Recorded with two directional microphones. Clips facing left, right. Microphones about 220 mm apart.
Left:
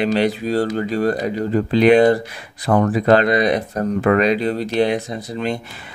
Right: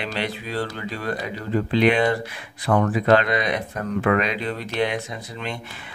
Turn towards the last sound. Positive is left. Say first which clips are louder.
# left 8 dB
turn(degrees=40)  # may be behind; listen again after turning